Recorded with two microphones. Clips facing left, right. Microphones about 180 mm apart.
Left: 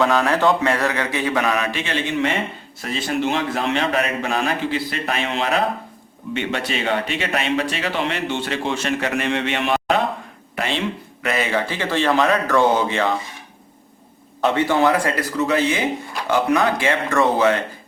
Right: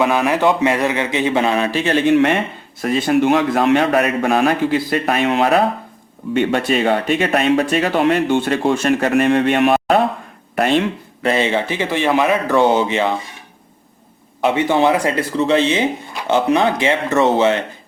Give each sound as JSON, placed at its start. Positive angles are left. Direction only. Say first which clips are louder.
{"t": 0.0, "sound": "speech", "louder": "right 2 dB", "side_deg": -15}
{"t": 10.5, "sound": "a sound", "louder": "right 9 dB", "side_deg": -55}
{"t": 11.2, "sound": "speech", "louder": "right 5 dB", "side_deg": -30}
{"t": 14.4, "sound": "speech", "louder": "right 2 dB", "side_deg": -15}